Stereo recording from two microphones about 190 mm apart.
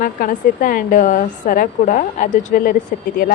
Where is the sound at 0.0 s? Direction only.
45° left (ahead or behind).